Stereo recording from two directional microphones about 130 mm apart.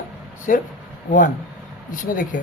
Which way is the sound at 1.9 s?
90° left.